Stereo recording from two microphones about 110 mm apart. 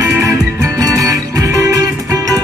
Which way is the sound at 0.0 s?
30° right (ahead or behind).